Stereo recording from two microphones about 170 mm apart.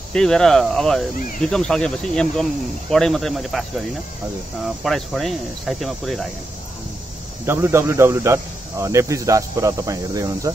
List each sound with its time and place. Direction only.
0.1 s speech: 5° left (ahead or behind)
4.8 s speech: centre (ahead or behind)
7.4 s speech: 15° right (ahead or behind)